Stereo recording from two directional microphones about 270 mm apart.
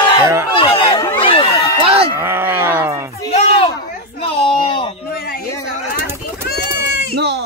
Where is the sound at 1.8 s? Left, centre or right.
Right.